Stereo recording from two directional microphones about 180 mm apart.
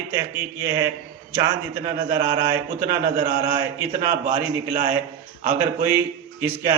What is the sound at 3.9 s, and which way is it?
Speech, 50° right (ahead or behind).